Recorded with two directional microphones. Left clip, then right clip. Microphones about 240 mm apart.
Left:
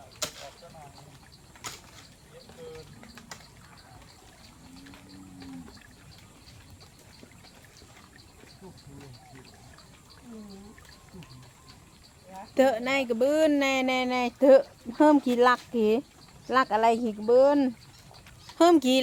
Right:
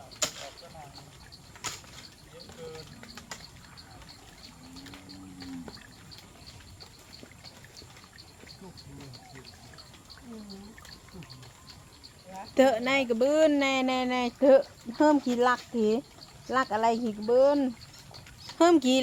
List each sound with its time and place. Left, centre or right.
0.2 s arrow: centre
12.4 s speech: centre; by 17.7 s left
18.5 s speech: left